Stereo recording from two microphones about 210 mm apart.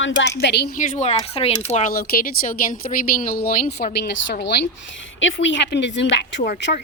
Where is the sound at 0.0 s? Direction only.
60° left (ahead or behind).